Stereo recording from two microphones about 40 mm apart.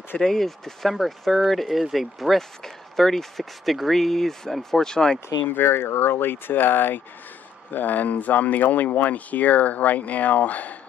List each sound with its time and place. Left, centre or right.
0.2 s speech: centre
5.5 s speech: left
7.7 s speech: left